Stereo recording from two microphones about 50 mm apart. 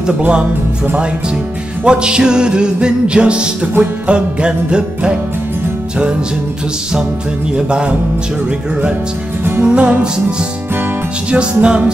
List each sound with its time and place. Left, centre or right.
1.9 s music: centre
7.5 s music: centre
9.6 s music: right
11.2 s music: right